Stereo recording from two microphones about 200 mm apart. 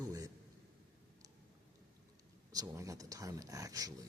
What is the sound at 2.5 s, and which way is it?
Speech, 15° right (ahead or behind).